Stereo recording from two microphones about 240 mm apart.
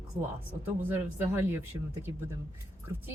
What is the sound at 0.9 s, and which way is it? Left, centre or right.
Speech, centre.